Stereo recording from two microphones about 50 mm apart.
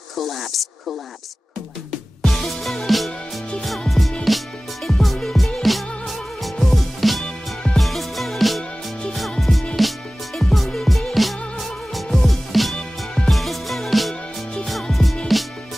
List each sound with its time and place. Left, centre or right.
0.1 s speech: centre
2.2 s music: centre
4.3 s music: centre
12.7 s music: centre
13.3 s music: centre